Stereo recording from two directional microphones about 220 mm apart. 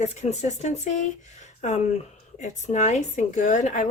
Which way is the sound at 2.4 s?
30° left (ahead or behind).